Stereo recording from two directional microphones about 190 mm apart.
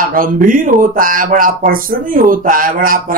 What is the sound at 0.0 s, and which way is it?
Speech, 50° right (ahead or behind).